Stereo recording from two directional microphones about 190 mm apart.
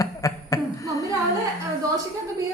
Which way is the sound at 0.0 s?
15° left (ahead or behind).